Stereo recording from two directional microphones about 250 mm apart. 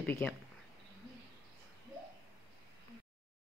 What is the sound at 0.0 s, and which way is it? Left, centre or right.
Speech, centre.